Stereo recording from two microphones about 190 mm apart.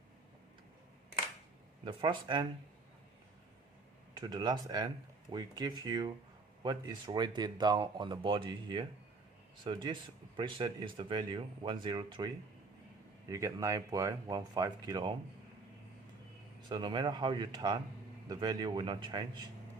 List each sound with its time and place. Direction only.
1.8 s speech: 25° right (ahead or behind)
4.1 s speech: 20° right (ahead or behind)
13.3 s speech: 15° right (ahead or behind)
16.6 s speech: 25° right (ahead or behind)